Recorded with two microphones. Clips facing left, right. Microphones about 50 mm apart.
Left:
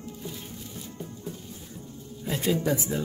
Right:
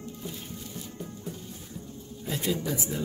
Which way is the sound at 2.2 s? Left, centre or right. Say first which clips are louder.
Left 4 dB; left.